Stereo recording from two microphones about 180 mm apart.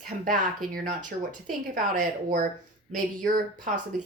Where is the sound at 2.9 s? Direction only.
50° right (ahead or behind).